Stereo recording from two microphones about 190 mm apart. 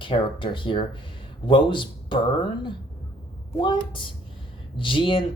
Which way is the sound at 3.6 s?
25° left (ahead or behind).